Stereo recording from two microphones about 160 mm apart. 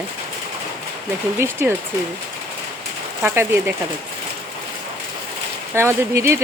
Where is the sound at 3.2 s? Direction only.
15° right (ahead or behind).